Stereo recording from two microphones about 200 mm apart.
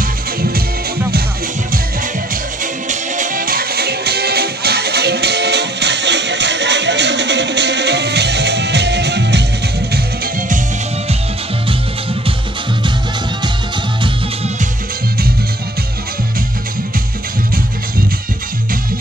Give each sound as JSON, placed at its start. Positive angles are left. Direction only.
{"t": 0.0, "sound": "music", "side_deg": -50}
{"t": 2.6, "sound": "music", "side_deg": -40}